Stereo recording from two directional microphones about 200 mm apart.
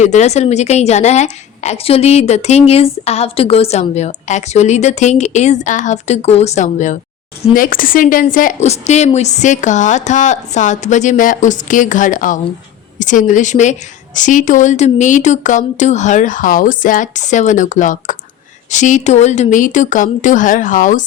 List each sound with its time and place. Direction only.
0.0 s a woman's voice: 35° left (ahead or behind)